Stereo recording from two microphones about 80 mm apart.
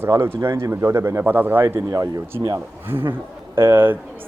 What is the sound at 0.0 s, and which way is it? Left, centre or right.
Speech, right.